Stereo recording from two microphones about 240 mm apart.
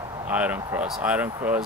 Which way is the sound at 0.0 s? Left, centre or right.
Centre.